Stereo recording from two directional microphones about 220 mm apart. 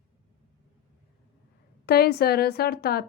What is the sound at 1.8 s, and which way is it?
A woman's voice, 45° left (ahead or behind).